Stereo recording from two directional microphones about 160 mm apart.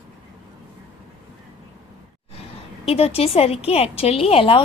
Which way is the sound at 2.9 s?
40° left (ahead or behind).